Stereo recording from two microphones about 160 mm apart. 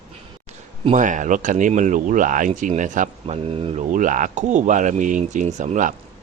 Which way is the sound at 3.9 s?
55° right (ahead or behind).